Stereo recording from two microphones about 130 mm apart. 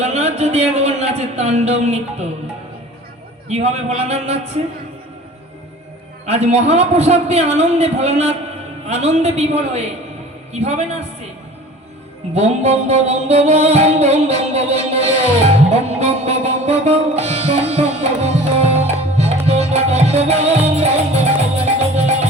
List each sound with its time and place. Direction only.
0.0 s speech: 55° right (ahead or behind)
3.5 s speech: 55° right (ahead or behind)
6.2 s speech: 55° right (ahead or behind)
12.3 s music: 55° right (ahead or behind)